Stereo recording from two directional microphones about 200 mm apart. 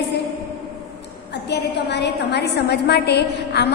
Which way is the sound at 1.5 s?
55° left (ahead or behind).